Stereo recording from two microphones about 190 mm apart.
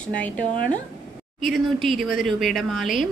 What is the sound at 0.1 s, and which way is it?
Speech, 5° left (ahead or behind).